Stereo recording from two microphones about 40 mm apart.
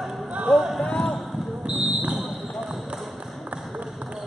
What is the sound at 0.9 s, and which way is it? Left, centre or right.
Basketball bounce, centre.